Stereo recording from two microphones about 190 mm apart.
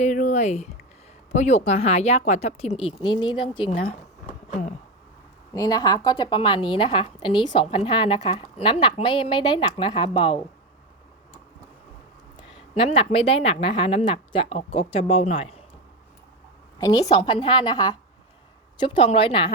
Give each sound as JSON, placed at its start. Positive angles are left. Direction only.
{"t": 0.0, "sound": "speech", "side_deg": 40}
{"t": 3.7, "sound": "a sound", "side_deg": 40}
{"t": 5.5, "sound": "a woman's voice", "side_deg": 20}
{"t": 12.7, "sound": "a woman's voice", "side_deg": 30}
{"t": 16.7, "sound": "a woman's voice", "side_deg": 20}